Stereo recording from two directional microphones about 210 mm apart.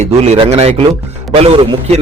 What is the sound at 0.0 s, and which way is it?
A man's voice, 30° right (ahead or behind).